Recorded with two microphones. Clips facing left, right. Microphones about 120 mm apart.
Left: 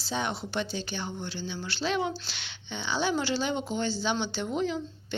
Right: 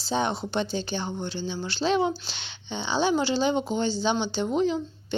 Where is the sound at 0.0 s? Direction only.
30° right (ahead or behind).